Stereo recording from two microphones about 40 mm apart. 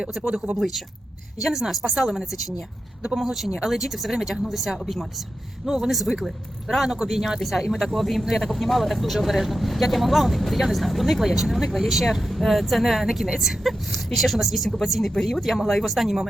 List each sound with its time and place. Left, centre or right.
0.0 s speech: centre
6.8 s speech: centre
7.2 s speech: centre